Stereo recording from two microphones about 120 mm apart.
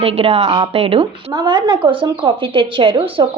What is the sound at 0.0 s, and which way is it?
Speech, 55° right (ahead or behind).